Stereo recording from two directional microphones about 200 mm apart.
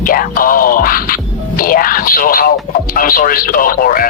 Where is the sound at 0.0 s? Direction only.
45° left (ahead or behind).